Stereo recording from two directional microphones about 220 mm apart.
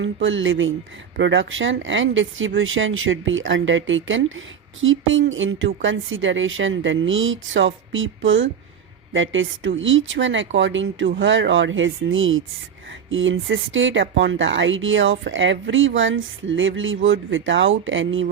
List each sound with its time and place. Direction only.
0.0 s speech: 60° right (ahead or behind)